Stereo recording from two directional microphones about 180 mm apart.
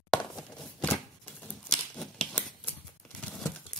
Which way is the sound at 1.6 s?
5° left (ahead or behind).